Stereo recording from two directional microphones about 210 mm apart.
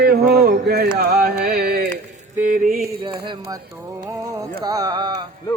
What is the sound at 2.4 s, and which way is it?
Mantra, 40° right (ahead or behind).